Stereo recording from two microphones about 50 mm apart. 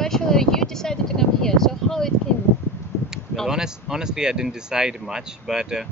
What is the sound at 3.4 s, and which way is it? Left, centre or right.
Speech, centre.